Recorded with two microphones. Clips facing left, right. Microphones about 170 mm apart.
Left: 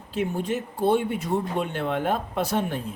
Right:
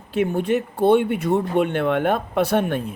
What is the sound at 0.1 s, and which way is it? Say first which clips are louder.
Speech: right 6 dB; 65° right (ahead or behind).